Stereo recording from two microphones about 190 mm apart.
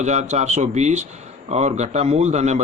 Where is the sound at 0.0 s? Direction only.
35° right (ahead or behind).